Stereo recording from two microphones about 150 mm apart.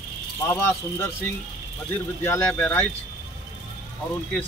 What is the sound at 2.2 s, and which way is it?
Speech, 15° left (ahead or behind).